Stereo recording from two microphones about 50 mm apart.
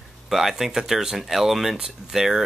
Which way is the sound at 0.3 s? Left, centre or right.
Centre.